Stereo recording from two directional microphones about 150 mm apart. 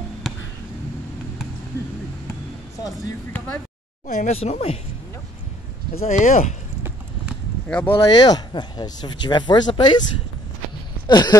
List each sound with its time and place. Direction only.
4.1 s speech: 50° left (ahead or behind)
6.0 s speech: 55° left (ahead or behind)
7.6 s speech: 10° left (ahead or behind)
8.0 s speech: 25° left (ahead or behind)
11.1 s speech: 30° left (ahead or behind)